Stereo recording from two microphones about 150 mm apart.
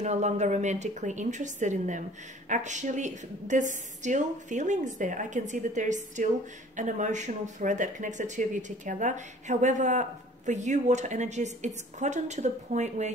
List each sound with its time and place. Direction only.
0.0 s a woman's voice: 50° right (ahead or behind)